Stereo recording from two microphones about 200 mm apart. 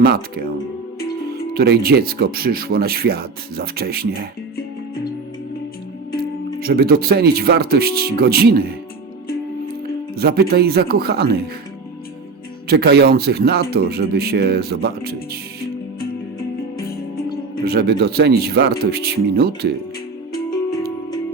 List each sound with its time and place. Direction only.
1.5 s speech: 50° right (ahead or behind)
6.6 s speech: 50° right (ahead or behind)
10.2 s speech: 50° right (ahead or behind)
12.6 s speech: 55° right (ahead or behind)
17.7 s speech: 50° right (ahead or behind)